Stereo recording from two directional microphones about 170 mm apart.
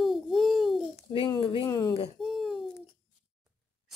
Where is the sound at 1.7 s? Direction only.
20° left (ahead or behind).